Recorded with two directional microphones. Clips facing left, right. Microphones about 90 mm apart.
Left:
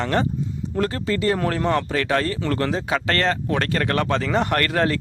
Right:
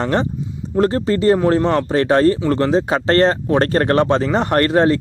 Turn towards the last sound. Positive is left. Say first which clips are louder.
# right 7 dB
turn(degrees=-30)  # may be behind; listen again after turning